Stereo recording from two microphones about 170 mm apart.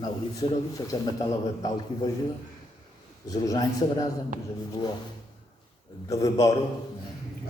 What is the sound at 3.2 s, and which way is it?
Speech, 20° left (ahead or behind).